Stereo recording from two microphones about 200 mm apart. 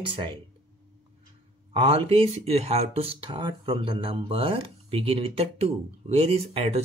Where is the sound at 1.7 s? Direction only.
25° right (ahead or behind).